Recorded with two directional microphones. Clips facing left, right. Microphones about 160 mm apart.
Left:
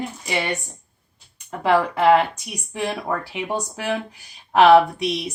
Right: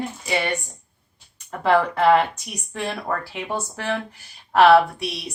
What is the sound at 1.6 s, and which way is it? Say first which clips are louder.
A woman's voice: even; 10° left (ahead or behind).